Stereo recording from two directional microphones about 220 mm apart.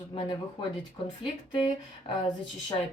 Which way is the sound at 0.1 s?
25° left (ahead or behind).